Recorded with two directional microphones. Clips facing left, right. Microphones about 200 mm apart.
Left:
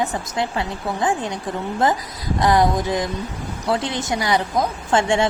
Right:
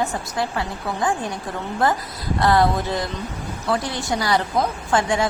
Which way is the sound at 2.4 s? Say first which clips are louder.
Left 1 dB; 15° left (ahead or behind).